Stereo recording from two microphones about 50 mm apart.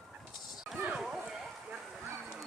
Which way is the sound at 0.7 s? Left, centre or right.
Centre.